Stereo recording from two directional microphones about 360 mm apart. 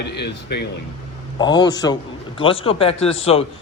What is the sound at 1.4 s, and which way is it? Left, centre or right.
A man's voice, centre.